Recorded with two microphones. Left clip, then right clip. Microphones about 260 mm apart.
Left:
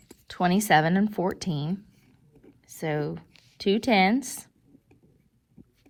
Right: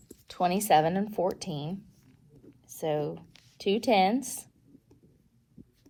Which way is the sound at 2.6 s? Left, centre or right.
Left.